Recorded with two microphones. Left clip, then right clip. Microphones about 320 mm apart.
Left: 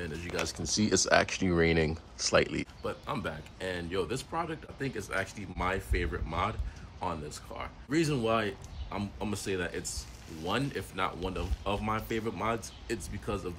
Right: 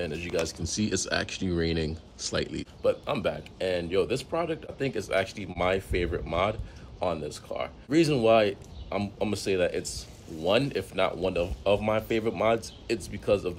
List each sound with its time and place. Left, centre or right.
0.0 s speech: centre
0.8 s speech: centre
2.8 s speech: centre